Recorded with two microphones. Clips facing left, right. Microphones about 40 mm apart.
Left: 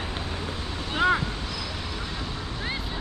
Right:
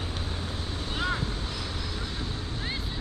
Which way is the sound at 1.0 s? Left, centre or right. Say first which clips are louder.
Left 9 dB; left.